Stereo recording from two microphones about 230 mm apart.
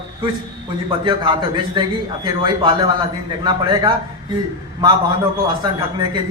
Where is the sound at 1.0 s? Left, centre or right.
Right.